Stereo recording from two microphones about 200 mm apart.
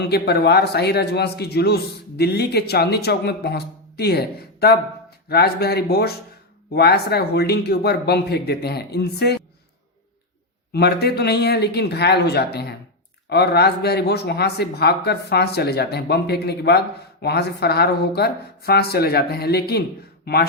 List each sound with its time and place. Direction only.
0.0 s speech: 55° left (ahead or behind)
10.7 s speech: 55° left (ahead or behind)